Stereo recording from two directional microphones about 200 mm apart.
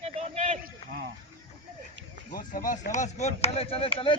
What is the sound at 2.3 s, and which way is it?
Speech, 40° left (ahead or behind).